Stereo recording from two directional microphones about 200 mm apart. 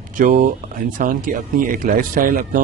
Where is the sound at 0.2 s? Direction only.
40° right (ahead or behind).